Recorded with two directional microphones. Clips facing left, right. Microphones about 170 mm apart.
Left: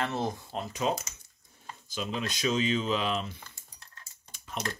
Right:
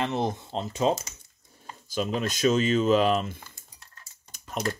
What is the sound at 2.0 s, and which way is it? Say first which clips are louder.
Speech: right 6 dB; 45° right (ahead or behind).